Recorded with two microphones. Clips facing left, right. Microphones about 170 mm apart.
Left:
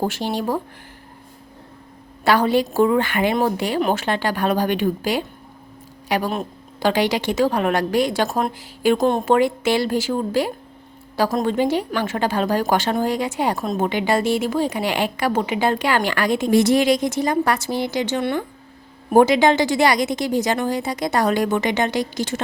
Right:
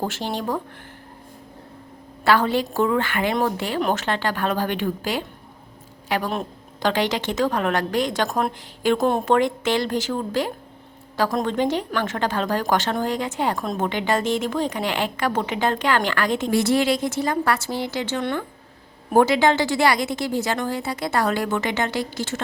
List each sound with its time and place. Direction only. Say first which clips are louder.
0.0 s a woman's voice: left 3 dB; 10° left (ahead or behind)
2.2 s a woman's voice: left 2 dB; 15° left (ahead or behind)